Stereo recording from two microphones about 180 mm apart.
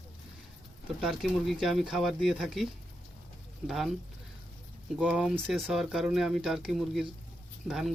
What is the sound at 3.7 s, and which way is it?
Speech, centre (ahead or behind).